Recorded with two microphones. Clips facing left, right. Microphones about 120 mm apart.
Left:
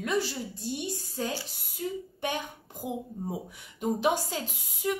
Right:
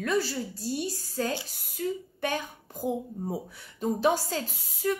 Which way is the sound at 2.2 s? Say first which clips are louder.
Right 2 dB; 15° left (ahead or behind).